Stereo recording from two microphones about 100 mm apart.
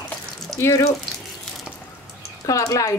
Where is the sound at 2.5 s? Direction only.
35° left (ahead or behind).